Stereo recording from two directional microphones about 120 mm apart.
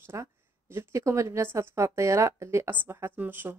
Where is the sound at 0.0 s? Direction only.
20° right (ahead or behind).